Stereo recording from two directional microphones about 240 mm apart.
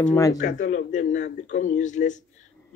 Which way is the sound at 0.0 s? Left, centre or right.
Centre.